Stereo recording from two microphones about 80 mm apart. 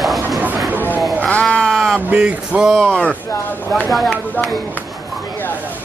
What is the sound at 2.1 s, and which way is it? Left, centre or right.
Speech, centre.